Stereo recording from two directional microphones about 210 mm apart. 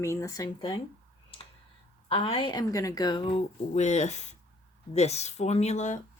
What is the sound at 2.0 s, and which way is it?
Speech, 25° left (ahead or behind).